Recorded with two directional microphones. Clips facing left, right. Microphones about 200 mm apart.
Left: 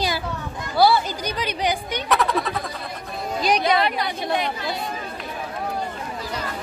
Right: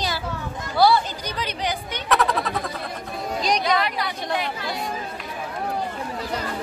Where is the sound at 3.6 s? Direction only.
25° left (ahead or behind).